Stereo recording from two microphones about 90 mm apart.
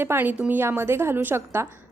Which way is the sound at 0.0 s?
25° right (ahead or behind).